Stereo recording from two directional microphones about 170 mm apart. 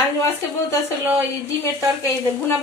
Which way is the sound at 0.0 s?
15° left (ahead or behind).